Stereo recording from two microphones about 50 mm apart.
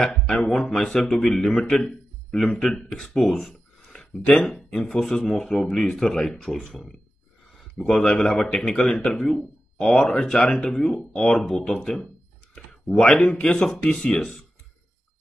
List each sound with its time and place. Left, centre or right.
0.4 s a man's voice: centre
3.9 s a sound: centre
4.8 s speech: centre
12.5 s a sound: centre
13.2 s speech: left
14.0 s speech: centre